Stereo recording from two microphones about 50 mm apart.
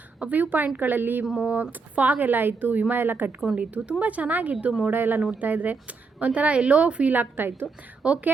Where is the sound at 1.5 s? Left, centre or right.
Right.